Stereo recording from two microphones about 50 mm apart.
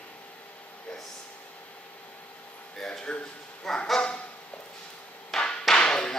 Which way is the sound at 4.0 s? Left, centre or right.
Left.